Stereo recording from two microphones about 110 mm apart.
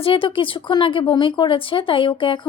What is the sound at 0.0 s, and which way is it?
A woman's voice, 50° left (ahead or behind).